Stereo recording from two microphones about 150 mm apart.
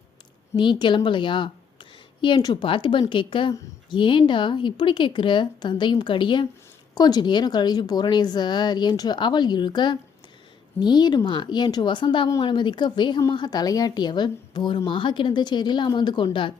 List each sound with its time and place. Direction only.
0.5 s a woman's voice: 30° left (ahead or behind)